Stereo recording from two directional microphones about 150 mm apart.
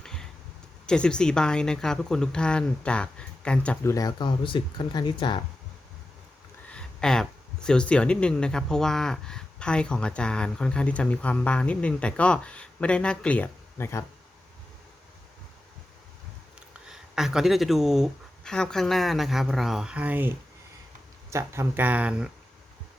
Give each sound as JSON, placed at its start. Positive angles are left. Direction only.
{"t": 0.0, "sound": "a sound", "side_deg": 5}
{"t": 0.9, "sound": "speech", "side_deg": 5}
{"t": 3.8, "sound": "speech", "side_deg": 25}
{"t": 6.7, "sound": "speech", "side_deg": 5}
{"t": 16.6, "sound": "speech", "side_deg": -5}